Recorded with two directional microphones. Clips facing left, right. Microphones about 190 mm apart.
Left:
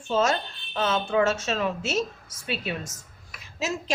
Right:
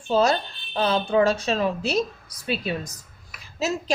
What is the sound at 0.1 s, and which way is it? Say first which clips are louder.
A woman's voice: right 3 dB; 35° right (ahead or behind).